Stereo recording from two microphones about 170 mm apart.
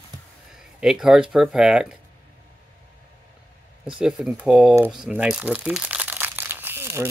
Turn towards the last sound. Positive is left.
turn(degrees=-15)  # may be behind; listen again after turning